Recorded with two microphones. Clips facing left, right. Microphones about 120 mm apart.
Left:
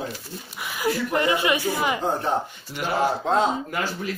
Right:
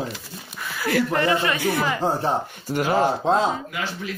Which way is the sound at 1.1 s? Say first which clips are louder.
Even; 20° left (ahead or behind).